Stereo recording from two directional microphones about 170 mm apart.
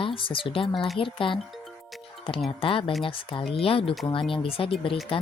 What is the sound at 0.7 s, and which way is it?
Speech, centre (ahead or behind).